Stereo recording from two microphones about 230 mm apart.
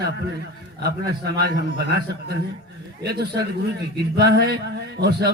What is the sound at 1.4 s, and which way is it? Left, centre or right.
Speech, right.